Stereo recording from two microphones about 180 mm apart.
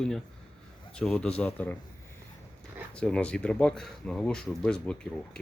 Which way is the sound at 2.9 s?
5° left (ahead or behind).